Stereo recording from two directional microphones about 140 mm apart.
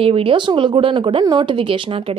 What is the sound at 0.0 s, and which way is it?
Speech, 40° right (ahead or behind).